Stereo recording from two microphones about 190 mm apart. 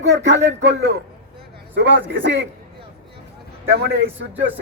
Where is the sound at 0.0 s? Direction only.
65° right (ahead or behind).